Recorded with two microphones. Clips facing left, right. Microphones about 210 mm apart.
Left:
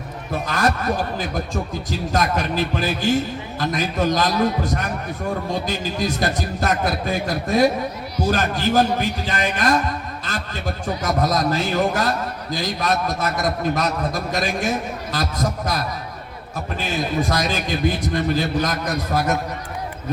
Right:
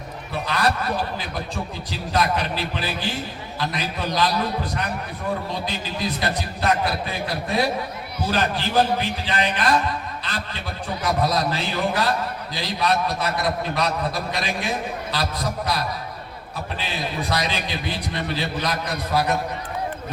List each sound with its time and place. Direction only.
0.3 s a man's voice: 45° left (ahead or behind)
10.2 s a sound: 45° left (ahead or behind)
11.0 s a man's voice: 45° left (ahead or behind)